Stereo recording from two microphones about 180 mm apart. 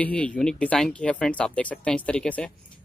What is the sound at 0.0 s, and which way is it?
Speech, 5° left (ahead or behind).